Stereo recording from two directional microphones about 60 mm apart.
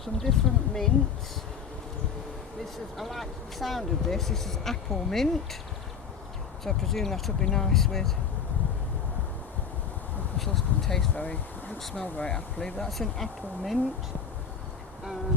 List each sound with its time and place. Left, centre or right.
0.0 s speech: centre
3.0 s speech: centre
6.7 s speech: centre
10.3 s speech: centre
11.1 s speech: left
12.9 s speech: centre